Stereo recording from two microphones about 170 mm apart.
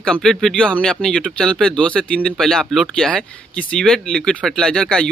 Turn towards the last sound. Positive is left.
turn(degrees=5)  # may be behind; listen again after turning